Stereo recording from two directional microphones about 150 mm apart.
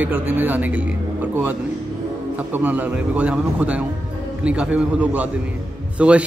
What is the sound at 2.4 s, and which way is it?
A man's voice, 10° right (ahead or behind).